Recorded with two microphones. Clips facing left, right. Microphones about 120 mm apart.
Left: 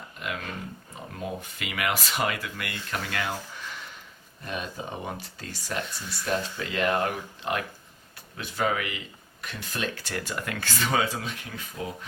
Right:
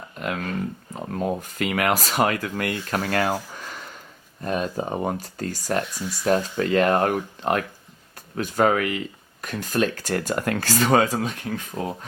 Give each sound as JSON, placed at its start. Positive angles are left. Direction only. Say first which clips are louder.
{"t": 1.1, "sound": "speech", "louder": "right 9 dB", "side_deg": -45}
{"t": 5.9, "sound": "speech", "louder": "right 6 dB", "side_deg": -10}
{"t": 6.2, "sound": "speech", "louder": "right 8 dB", "side_deg": -45}